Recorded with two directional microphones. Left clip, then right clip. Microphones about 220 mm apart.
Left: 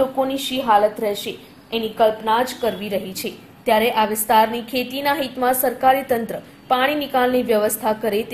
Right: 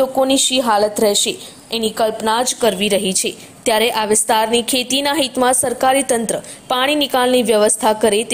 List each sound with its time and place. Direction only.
0.2 s a woman's voice: 40° right (ahead or behind)